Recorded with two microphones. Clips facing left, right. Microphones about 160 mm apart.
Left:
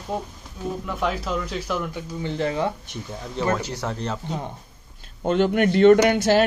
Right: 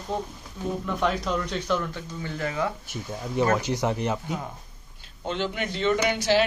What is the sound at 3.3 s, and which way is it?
Speech, 15° right (ahead or behind).